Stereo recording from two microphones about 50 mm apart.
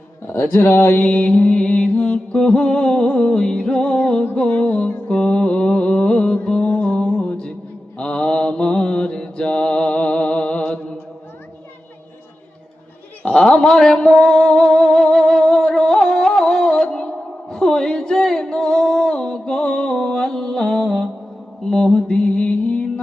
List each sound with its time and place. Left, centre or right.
0.5 s a sound: left
1.0 s music: left
4.4 s mantra: left
13.3 s speech: centre
14.1 s music: centre
21.7 s mantra: centre
22.0 s music: left